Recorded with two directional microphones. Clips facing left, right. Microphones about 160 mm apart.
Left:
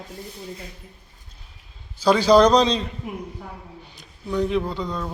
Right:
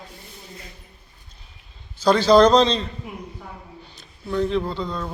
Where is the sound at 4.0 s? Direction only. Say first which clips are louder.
Even; 15° left (ahead or behind).